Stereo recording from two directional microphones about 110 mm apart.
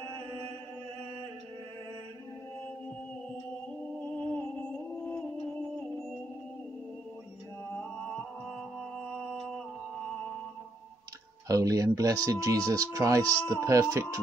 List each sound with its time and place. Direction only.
7.7 s music: 5° left (ahead or behind)
11.4 s speech: 30° right (ahead or behind)